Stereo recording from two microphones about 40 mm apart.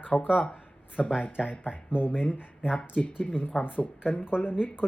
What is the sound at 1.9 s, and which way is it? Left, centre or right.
Speech, left.